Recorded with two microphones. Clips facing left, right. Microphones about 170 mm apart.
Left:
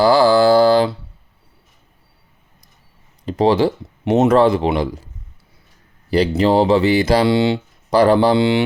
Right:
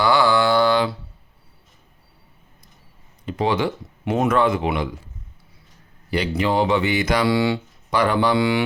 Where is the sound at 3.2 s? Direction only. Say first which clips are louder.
Left 7 dB; 35° left (ahead or behind).